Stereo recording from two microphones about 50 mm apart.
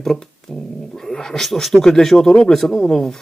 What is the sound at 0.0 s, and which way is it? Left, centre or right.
Speech, centre.